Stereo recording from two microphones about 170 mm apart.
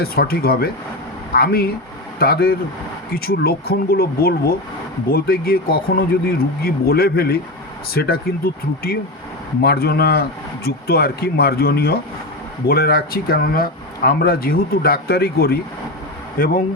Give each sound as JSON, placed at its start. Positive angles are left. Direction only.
{"t": 0.0, "sound": "speech", "side_deg": 65}
{"t": 9.6, "sound": "speech", "side_deg": 65}